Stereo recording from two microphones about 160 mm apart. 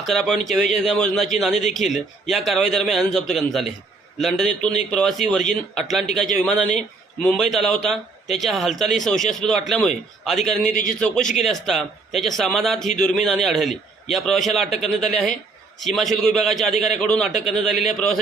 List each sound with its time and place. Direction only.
0.0 s speech: centre (ahead or behind)
1.5 s speech: 45° left (ahead or behind)
2.3 s speech: centre (ahead or behind)
10.7 s a man's voice: 55° left (ahead or behind)
11.0 s speech: 5° left (ahead or behind)